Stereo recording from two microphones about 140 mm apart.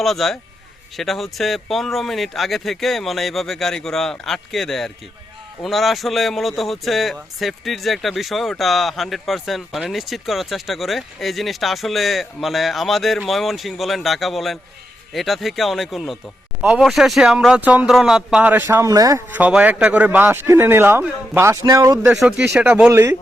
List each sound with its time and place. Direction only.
0.0 s speech: centre (ahead or behind); by 19.2 s 25° right (ahead or behind)
19.3 s speech: 10° right (ahead or behind); by 21.9 s 25° right (ahead or behind)
22.0 s speech: 5° right (ahead or behind)
22.9 s a man's voice: 20° right (ahead or behind)